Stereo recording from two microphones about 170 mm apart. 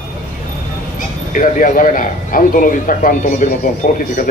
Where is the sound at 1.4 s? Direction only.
50° left (ahead or behind).